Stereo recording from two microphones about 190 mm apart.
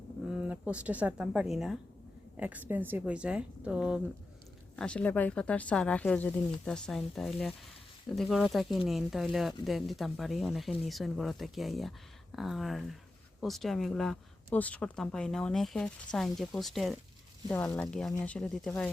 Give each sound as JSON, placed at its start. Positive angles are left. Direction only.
{"t": 0.4, "sound": "speech", "side_deg": -5}
{"t": 4.8, "sound": "speech", "side_deg": 5}